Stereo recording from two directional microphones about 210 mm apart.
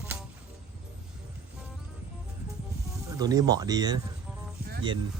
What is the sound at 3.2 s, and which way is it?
Speech, 20° right (ahead or behind).